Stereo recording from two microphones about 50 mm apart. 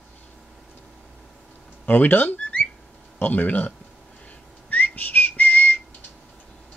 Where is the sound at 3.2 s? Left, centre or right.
Left.